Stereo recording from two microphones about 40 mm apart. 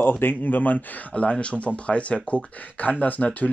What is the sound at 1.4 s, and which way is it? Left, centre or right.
Speech, left.